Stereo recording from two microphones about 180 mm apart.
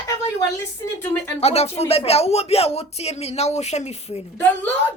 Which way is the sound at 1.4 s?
35° left (ahead or behind).